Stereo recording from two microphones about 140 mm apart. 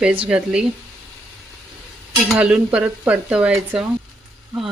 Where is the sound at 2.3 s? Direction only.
5° right (ahead or behind).